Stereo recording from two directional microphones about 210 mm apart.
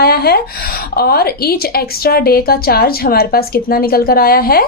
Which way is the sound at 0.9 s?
50° left (ahead or behind).